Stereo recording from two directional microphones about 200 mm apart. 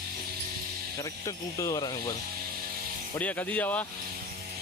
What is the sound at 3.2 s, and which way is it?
Speech, 5° left (ahead or behind).